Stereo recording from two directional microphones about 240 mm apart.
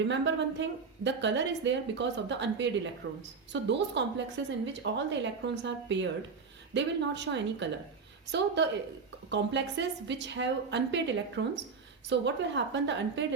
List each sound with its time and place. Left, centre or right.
0.1 s a woman's voice: right